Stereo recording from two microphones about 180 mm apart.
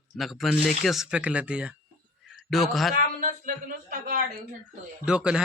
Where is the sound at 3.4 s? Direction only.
50° right (ahead or behind).